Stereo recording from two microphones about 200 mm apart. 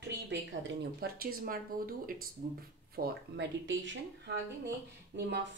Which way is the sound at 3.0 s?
60° right (ahead or behind).